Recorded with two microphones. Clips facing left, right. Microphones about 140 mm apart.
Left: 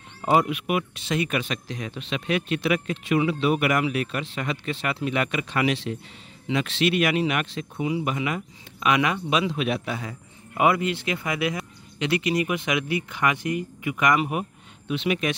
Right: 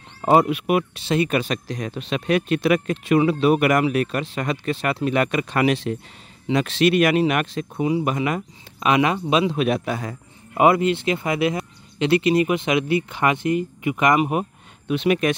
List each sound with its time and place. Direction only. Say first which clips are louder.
0.2 s speech: right 5 dB; 40° right (ahead or behind)
8.8 s speech: right 4 dB; 30° right (ahead or behind)
9.6 s speech: right 5 dB; 45° right (ahead or behind)
10.6 s speech: right 5 dB; 30° right (ahead or behind)
14.9 s speech: right 5 dB; 50° right (ahead or behind)